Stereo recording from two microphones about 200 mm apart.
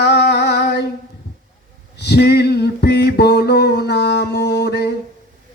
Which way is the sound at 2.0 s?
55° left (ahead or behind).